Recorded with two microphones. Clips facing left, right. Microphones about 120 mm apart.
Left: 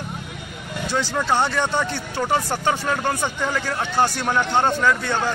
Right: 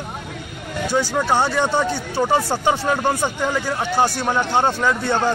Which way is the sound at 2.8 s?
20° right (ahead or behind).